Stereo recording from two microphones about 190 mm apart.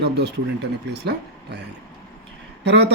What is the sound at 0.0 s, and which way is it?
Speech, 60° right (ahead or behind).